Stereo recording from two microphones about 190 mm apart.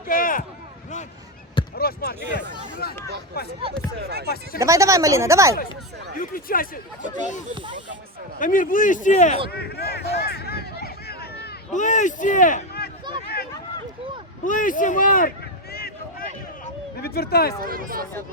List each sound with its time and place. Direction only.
0.1 s speech: 45° left (ahead or behind)
1.7 s speech: 55° left (ahead or behind)
3.9 s speech: 55° right (ahead or behind)
4.5 s speech: 15° right (ahead or behind)
6.1 s speech: 50° left (ahead or behind)
7.5 s speech: 25° right (ahead or behind)
8.4 s speech: 45° left (ahead or behind)
9.5 s a sound: 55° left (ahead or behind)
11.7 s speech: 40° left (ahead or behind)
13.2 s a sound: 55° left (ahead or behind)
14.4 s speech: 45° left (ahead or behind)
15.7 s a sound: 55° left (ahead or behind)
17.0 s speech: 55° left (ahead or behind)
17.6 s speech: 50° right (ahead or behind)